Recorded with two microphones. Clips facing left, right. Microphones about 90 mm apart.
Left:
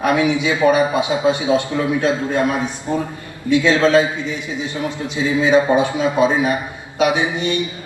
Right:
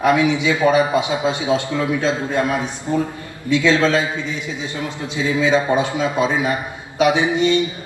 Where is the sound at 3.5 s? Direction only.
20° left (ahead or behind).